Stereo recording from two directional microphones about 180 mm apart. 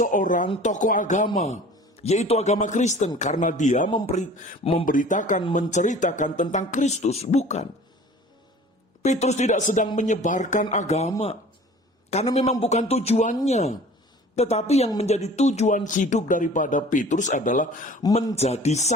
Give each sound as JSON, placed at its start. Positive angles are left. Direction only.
{"t": 0.0, "sound": "a man's voice", "side_deg": 45}
{"t": 4.9, "sound": "speech", "side_deg": 45}
{"t": 9.0, "sound": "speech", "side_deg": 40}
{"t": 12.1, "sound": "a man's voice", "side_deg": 40}